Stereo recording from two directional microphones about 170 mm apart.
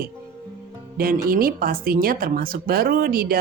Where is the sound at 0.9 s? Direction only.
60° right (ahead or behind).